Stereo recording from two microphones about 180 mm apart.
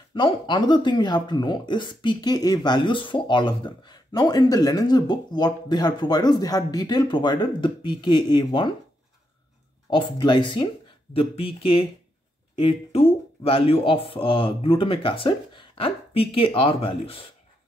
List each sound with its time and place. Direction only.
0.1 s speech: 25° left (ahead or behind)
9.8 s speech: 25° left (ahead or behind)